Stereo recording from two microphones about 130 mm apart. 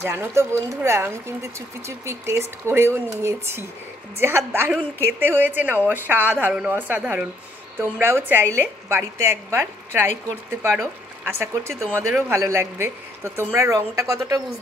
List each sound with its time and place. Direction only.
0.0 s a woman's voice: 20° right (ahead or behind)